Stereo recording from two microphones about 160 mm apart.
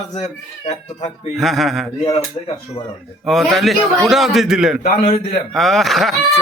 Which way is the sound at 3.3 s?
Centre (ahead or behind).